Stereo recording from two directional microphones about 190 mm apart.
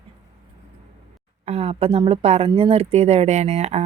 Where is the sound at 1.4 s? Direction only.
35° right (ahead or behind).